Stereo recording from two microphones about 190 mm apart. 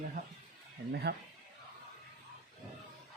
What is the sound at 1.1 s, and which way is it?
Speech, 55° right (ahead or behind).